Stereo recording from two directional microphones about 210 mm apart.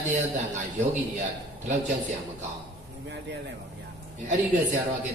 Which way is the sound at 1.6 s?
35° right (ahead or behind).